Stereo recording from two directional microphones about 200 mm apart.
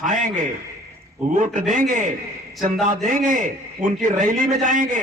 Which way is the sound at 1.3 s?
40° right (ahead or behind).